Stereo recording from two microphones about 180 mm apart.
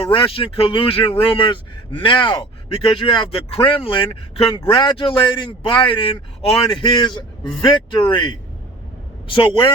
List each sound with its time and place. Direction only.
0.0 s speech: 30° left (ahead or behind)